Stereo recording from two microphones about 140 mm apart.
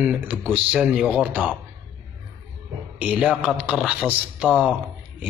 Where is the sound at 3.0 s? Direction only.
5° right (ahead or behind).